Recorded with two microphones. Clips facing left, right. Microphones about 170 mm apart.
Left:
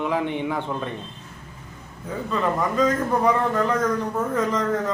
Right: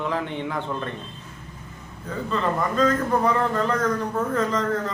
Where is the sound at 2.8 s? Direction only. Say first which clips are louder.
Even; 15° left (ahead or behind).